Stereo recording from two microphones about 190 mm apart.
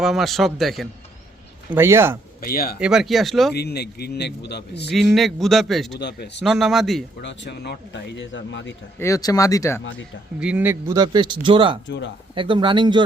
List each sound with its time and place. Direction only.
0.0 s a man's voice: centre (ahead or behind)
1.7 s speech: 15° right (ahead or behind)
2.4 s speech: 50° left (ahead or behind)
2.8 s a man's voice: centre (ahead or behind)
3.5 s a man's voice: 60° left (ahead or behind)
4.9 s a man's voice: centre (ahead or behind)
6.0 s a man's voice: 60° left (ahead or behind)
6.4 s a man's voice: centre (ahead or behind)
7.2 s speech: 65° left (ahead or behind)
9.0 s speech: 15° left (ahead or behind)
10.4 s speech: 10° right (ahead or behind); by 13.0 s 25° right (ahead or behind)